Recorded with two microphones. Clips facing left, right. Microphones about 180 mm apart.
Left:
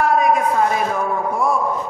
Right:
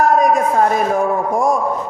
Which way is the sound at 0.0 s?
45° right (ahead or behind).